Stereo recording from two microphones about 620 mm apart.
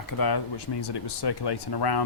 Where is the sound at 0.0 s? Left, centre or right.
Left.